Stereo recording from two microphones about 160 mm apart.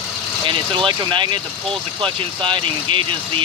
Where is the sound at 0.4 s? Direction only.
30° right (ahead or behind).